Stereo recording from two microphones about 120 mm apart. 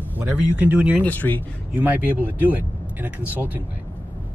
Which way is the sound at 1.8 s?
15° right (ahead or behind).